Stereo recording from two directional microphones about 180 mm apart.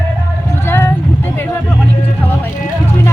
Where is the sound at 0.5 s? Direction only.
15° left (ahead or behind).